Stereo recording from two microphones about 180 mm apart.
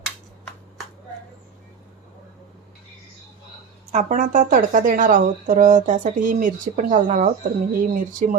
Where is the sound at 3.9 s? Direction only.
40° right (ahead or behind).